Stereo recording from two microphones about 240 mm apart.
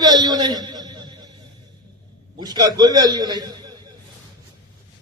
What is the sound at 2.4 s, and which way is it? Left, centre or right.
A man's voice, centre.